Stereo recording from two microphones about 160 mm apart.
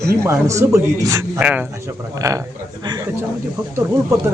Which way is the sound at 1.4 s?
10° right (ahead or behind).